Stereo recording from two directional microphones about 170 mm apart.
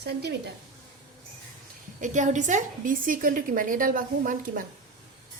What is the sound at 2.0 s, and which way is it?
A woman's voice, 45° right (ahead or behind).